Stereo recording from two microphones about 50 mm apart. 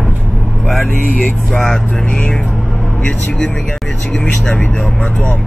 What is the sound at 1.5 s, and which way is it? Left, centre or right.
Speech, centre.